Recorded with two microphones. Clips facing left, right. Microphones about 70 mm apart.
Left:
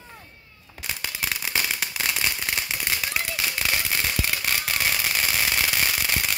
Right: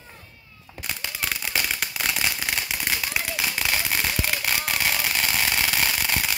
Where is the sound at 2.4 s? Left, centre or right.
Centre.